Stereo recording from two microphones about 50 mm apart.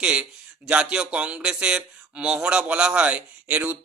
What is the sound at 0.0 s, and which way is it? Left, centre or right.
Speech, right.